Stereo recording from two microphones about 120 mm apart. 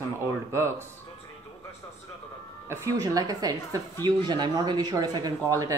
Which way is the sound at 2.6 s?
25° right (ahead or behind).